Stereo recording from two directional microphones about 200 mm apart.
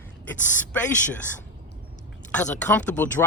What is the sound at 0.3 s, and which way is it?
Speech, 10° left (ahead or behind).